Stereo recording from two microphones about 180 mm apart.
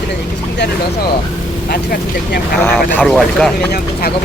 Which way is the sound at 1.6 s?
55° left (ahead or behind).